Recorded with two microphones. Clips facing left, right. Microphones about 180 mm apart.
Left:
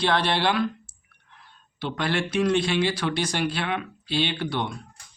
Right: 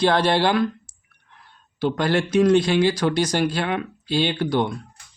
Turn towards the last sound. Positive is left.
turn(degrees=-40)  # may be behind; listen again after turning